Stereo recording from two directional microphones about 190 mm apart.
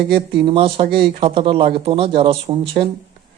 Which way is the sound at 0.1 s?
25° right (ahead or behind).